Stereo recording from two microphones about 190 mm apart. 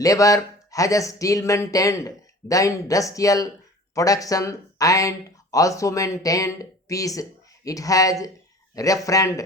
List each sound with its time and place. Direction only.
0.0 s speech: 15° left (ahead or behind)